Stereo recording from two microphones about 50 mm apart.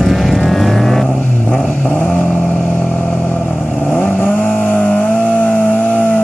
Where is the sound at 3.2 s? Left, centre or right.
Left.